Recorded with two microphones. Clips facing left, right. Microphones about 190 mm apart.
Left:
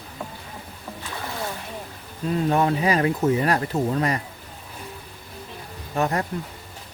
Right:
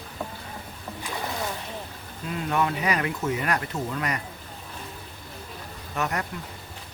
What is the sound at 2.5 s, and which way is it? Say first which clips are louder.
Speech: left 3 dB; 35° left (ahead or behind).